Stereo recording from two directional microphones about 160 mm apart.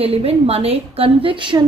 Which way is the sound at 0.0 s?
40° right (ahead or behind).